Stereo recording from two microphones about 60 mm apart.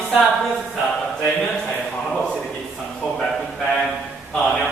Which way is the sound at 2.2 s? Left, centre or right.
Centre.